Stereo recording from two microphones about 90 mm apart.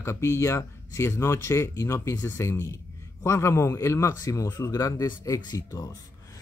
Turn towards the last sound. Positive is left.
turn(degrees=40)  # may be behind; listen again after turning